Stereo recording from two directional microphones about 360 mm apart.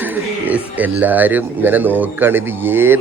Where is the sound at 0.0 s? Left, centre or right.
Centre.